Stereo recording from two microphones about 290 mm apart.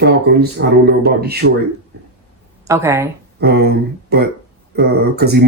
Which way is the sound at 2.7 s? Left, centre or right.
Centre.